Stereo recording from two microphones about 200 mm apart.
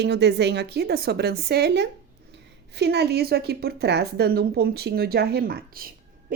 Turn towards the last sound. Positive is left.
turn(degrees=-50)  # may be behind; listen again after turning